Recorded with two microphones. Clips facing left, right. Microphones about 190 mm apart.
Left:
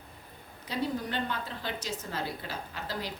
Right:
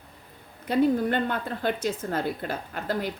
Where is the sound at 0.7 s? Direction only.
55° right (ahead or behind).